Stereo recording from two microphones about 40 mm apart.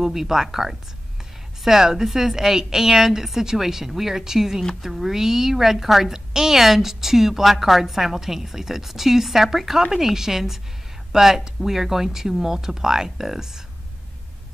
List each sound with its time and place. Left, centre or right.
0.0 s a woman's voice: centre